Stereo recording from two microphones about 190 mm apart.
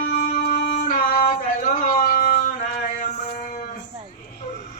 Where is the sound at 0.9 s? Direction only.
45° left (ahead or behind).